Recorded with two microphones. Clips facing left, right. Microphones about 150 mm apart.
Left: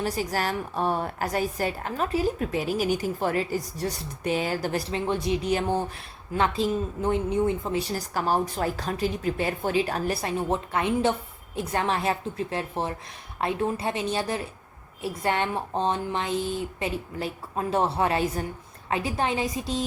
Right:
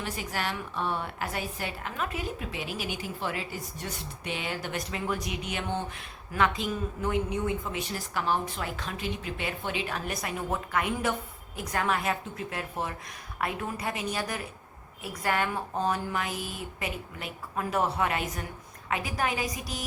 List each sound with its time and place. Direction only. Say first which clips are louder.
0.0 s a woman's voice: left 6 dB; 40° left (ahead or behind)